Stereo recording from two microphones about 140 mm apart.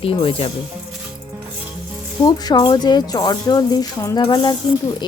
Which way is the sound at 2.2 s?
35° left (ahead or behind).